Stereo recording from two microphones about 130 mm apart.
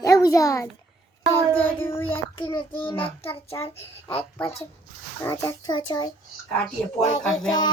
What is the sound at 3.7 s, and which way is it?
Speech, 50° left (ahead or behind).